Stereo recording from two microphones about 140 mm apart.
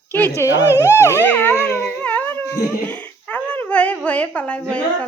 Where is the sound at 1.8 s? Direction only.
10° left (ahead or behind).